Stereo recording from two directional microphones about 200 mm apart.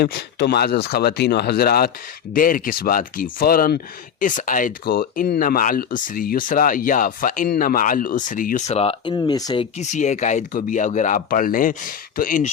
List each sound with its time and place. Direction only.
0.0 s speech: 55° left (ahead or behind); by 9.6 s 20° left (ahead or behind)
9.7 s speech: 35° left (ahead or behind)